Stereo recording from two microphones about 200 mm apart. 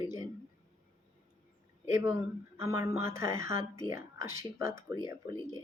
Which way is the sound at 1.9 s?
15° right (ahead or behind).